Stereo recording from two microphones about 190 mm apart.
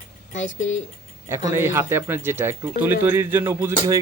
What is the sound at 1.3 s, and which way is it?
Speech, 15° right (ahead or behind).